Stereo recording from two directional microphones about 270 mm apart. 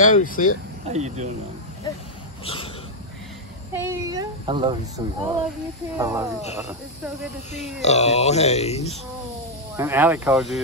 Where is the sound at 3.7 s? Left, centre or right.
Centre.